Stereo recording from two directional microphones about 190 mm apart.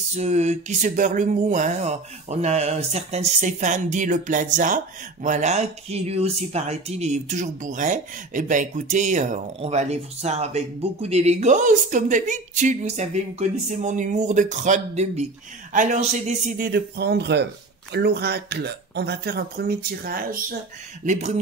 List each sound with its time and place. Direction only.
0.1 s a man's voice: 35° right (ahead or behind)